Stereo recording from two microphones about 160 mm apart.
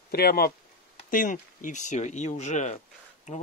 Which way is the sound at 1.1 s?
55° left (ahead or behind).